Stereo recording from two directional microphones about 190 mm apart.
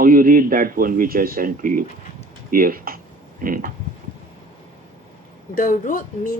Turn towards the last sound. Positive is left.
turn(degrees=45)  # may be behind; listen again after turning